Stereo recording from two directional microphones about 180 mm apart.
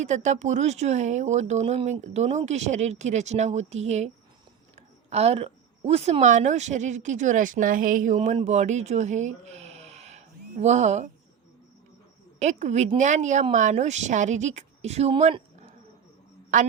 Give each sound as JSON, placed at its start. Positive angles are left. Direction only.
{"t": 0.0, "sound": "a woman's voice", "side_deg": -40}
{"t": 12.4, "sound": "speech", "side_deg": -40}
{"t": 16.5, "sound": "a woman's voice", "side_deg": -45}